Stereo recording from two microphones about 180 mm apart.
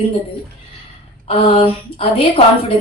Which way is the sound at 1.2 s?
30° left (ahead or behind).